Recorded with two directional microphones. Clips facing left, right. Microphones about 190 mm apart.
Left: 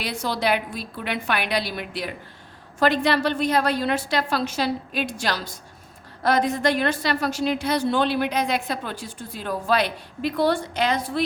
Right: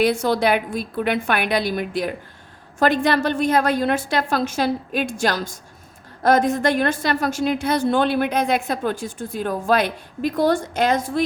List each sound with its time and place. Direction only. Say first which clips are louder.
0.0 s a woman's voice: right 7 dB; 50° right (ahead or behind)